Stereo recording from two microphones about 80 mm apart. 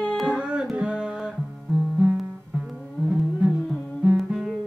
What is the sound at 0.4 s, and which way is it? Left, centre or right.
Music, centre.